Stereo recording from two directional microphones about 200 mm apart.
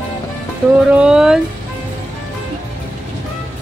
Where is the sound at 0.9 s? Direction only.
5° right (ahead or behind).